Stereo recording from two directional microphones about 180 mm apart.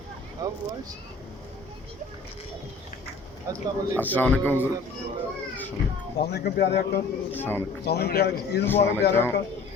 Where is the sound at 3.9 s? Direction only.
10° left (ahead or behind).